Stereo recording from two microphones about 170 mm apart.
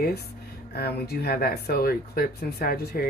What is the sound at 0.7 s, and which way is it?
Speech, 70° left (ahead or behind).